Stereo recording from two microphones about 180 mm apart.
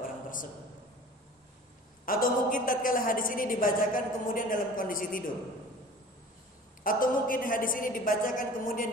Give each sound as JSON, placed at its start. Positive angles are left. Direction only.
{"t": 2.0, "sound": "a woman's voice", "side_deg": 50}
{"t": 6.8, "sound": "a woman's voice", "side_deg": 50}